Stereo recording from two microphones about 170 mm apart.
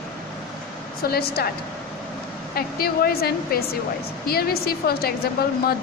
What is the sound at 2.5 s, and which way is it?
A woman's voice, 60° left (ahead or behind).